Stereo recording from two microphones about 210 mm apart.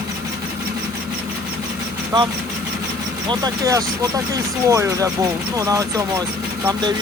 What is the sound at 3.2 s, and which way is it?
Speech, 15° right (ahead or behind).